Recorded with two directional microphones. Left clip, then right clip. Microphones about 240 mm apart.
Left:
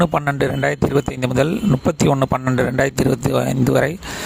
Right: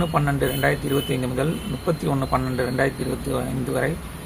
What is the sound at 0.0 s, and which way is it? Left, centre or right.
Speech, left.